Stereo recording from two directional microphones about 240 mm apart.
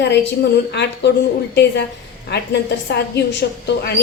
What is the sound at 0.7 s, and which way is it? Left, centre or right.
Speech, left.